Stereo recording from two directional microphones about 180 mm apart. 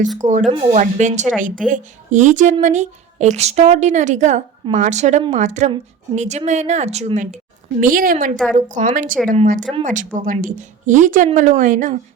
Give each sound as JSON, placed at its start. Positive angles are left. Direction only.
{"t": 0.3, "sound": "speech", "side_deg": -40}
{"t": 0.5, "sound": "speech", "side_deg": -30}
{"t": 0.8, "sound": "a woman's voice", "side_deg": -40}
{"t": 7.8, "sound": "a woman's voice", "side_deg": -50}